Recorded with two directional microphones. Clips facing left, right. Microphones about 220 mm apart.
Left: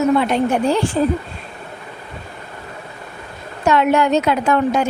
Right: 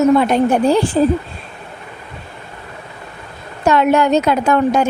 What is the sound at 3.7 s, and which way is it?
A woman's voice, 40° right (ahead or behind).